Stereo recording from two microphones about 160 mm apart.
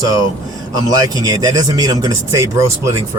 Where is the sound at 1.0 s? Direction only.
25° right (ahead or behind).